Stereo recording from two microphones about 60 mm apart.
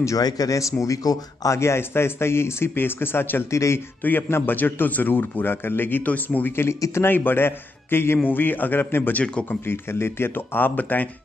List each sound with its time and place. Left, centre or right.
0.0 s speech: left
1.6 s a man's voice: left
3.4 s speech: left
4.0 s a man's voice: left
7.2 s a man's voice: left